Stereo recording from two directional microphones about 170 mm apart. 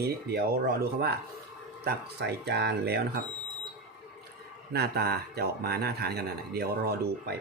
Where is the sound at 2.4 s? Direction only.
75° right (ahead or behind).